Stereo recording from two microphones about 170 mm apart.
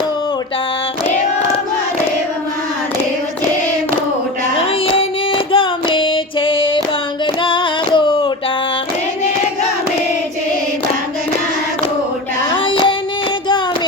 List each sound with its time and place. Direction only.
4.9 s female singing: 30° left (ahead or behind)
7.4 s singing: 30° left (ahead or behind)
12.5 s child singing: 30° left (ahead or behind)